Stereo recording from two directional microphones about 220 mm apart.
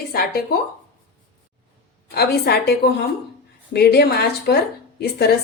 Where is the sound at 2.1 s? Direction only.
45° left (ahead or behind).